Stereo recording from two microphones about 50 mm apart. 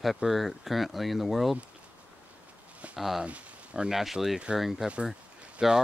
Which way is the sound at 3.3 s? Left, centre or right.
Right.